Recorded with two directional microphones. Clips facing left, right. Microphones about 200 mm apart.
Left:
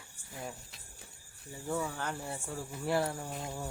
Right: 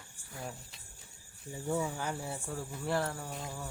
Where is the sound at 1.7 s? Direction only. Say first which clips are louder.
Right 1 dB; 10° right (ahead or behind); by 3.1 s 10° left (ahead or behind).